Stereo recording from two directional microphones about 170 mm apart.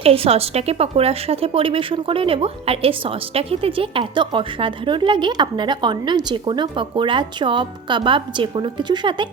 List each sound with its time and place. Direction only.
0.0 s a woman's voice: 35° right (ahead or behind)